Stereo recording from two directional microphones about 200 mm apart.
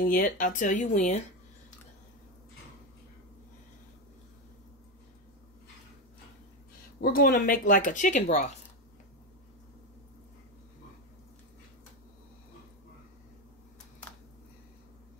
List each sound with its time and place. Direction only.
0.0 s speech: 45° left (ahead or behind)
7.0 s speech: 50° left (ahead or behind)